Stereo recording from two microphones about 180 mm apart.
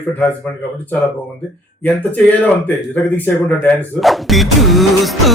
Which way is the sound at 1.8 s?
10° left (ahead or behind).